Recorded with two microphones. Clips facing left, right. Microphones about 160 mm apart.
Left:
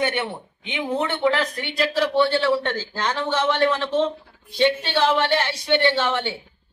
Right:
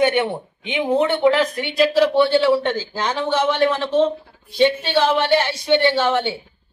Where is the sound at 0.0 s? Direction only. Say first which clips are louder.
Right 7 dB; 20° right (ahead or behind).